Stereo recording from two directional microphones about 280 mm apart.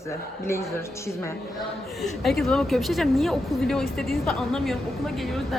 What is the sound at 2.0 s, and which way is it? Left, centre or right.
A woman's voice, centre.